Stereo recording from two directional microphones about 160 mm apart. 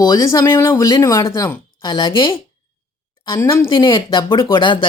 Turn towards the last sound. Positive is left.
turn(degrees=30)  # may be behind; listen again after turning